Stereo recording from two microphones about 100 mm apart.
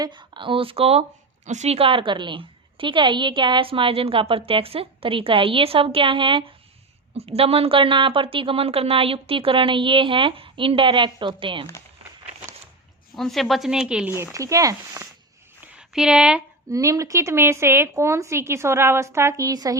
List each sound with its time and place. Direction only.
0.0 s a woman's voice: 50° right (ahead or behind)
7.1 s a woman's voice: 85° right; by 11.6 s 60° right (ahead or behind)
13.1 s speech: centre (ahead or behind)
14.3 s speech: 35° right (ahead or behind)
15.9 s speech: 5° right (ahead or behind)
16.6 s a woman's voice: 35° right (ahead or behind)